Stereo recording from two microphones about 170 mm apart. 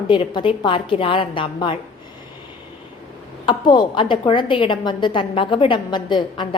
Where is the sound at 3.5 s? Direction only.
25° left (ahead or behind).